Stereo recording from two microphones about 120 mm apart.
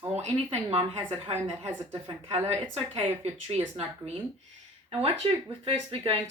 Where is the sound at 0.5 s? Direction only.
55° right (ahead or behind).